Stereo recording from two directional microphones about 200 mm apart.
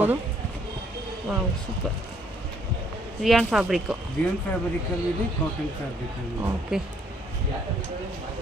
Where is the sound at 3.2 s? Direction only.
Centre (ahead or behind).